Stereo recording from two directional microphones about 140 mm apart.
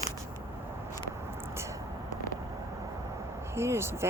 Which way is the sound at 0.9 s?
20° right (ahead or behind).